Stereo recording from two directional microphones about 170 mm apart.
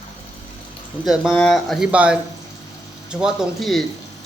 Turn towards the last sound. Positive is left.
turn(degrees=0)  # may be behind; listen again after turning